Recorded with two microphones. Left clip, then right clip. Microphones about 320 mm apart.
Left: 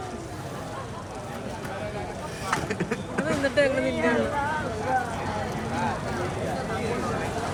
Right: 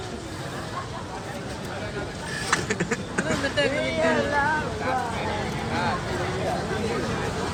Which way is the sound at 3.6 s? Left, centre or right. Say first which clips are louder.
Left 2 dB; left.